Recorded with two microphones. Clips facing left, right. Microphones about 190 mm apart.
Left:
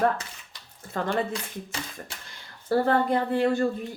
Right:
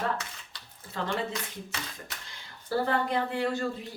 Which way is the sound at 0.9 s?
50° left (ahead or behind).